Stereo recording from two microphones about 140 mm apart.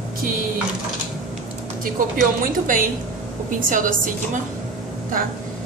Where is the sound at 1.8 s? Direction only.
75° right (ahead or behind).